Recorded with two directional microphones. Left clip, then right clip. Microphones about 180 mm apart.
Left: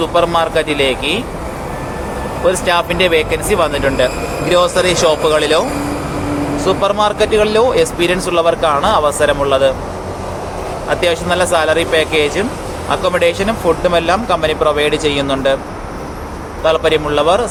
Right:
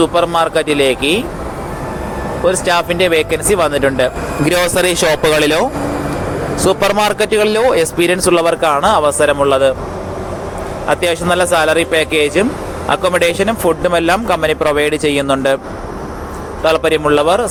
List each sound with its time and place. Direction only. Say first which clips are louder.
0.0 s speech: right 1 dB; 30° right (ahead or behind)
2.5 s speech: even; 30° right (ahead or behind)
6.7 s speech: right 1 dB; 45° right (ahead or behind)
10.8 s speech: right 1 dB; 35° right (ahead or behind)
16.6 s speech: right 1 dB; 35° right (ahead or behind)